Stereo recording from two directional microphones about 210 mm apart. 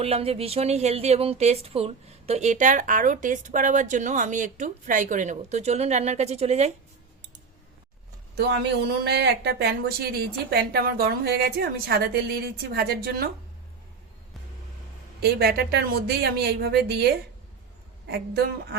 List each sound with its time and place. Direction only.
0.0 s a woman's voice: 30° right (ahead or behind)
8.4 s speech: 55° right (ahead or behind)
15.2 s speech: 50° right (ahead or behind)